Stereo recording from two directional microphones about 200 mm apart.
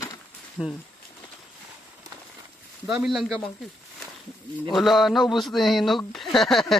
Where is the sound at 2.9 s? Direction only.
Centre (ahead or behind).